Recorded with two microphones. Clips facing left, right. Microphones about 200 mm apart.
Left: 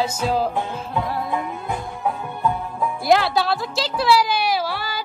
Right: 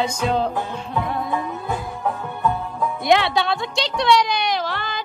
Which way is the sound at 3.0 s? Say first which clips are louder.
Even; centre (ahead or behind).